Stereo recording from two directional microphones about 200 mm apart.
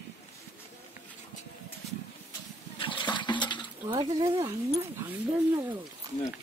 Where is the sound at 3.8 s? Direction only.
20° right (ahead or behind).